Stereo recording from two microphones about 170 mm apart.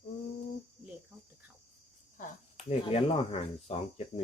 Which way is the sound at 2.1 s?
45° left (ahead or behind).